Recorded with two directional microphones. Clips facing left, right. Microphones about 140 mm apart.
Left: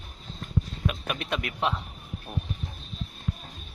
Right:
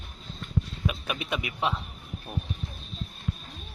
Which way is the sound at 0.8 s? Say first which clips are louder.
Even; 5° right (ahead or behind).